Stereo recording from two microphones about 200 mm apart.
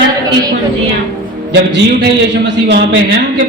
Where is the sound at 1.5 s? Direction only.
60° right (ahead or behind).